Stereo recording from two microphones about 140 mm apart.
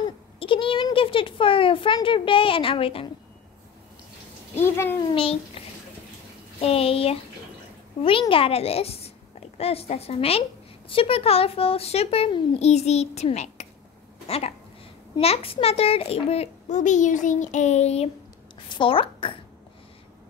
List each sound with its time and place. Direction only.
0.0 s a woman's voice: 40° left (ahead or behind)
4.6 s a child's voice: 15° left (ahead or behind)
5.1 s a child's voice: 45° left (ahead or behind)
6.6 s a child's voice: 45° left (ahead or behind)
18.7 s a woman's voice: 35° left (ahead or behind)